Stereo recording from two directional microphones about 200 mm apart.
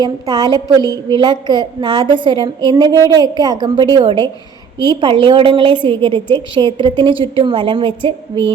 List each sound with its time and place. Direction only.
0.0 s a woman's voice: 20° right (ahead or behind)